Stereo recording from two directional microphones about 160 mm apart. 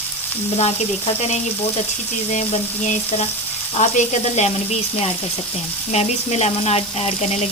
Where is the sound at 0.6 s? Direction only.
40° left (ahead or behind).